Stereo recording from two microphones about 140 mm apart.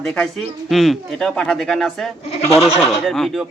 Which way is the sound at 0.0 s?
5° left (ahead or behind).